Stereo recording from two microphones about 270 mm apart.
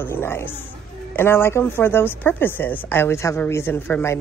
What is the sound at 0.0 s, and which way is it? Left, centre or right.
Speech, centre.